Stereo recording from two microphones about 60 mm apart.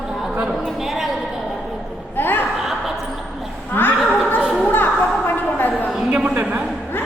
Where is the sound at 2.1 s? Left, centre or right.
Left.